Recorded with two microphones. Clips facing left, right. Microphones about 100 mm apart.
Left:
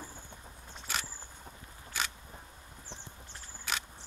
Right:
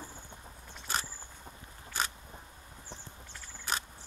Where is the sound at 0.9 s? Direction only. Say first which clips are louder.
Right 2 dB; 40° right (ahead or behind).